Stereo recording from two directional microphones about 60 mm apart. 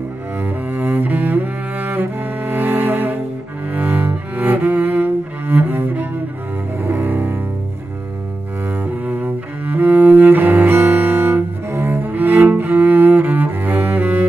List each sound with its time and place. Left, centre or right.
0.4 s cello: right
6.8 s double bass: right
9.0 s cello: right